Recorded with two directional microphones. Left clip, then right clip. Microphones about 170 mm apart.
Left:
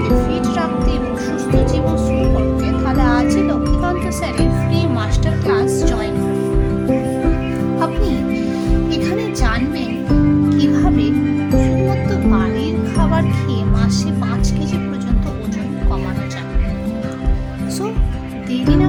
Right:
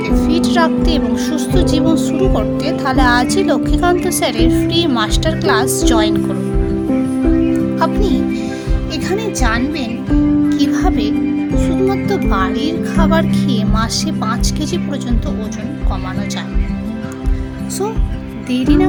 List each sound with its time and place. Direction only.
0.3 s music: 45° right (ahead or behind)
2.6 s speech: 45° right (ahead or behind)
9.0 s speech: 25° right (ahead or behind)
10.5 s music: 30° right (ahead or behind)
11.9 s speech: 35° right (ahead or behind)
18.5 s speech: 20° right (ahead or behind)